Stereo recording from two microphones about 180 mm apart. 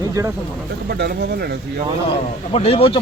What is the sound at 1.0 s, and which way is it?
Speech, 60° right (ahead or behind).